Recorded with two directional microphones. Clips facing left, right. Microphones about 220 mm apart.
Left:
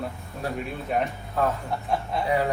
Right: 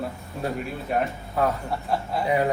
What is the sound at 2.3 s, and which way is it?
Speech, 20° right (ahead or behind).